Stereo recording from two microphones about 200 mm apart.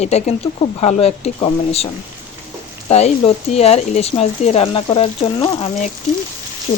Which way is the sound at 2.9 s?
30° left (ahead or behind).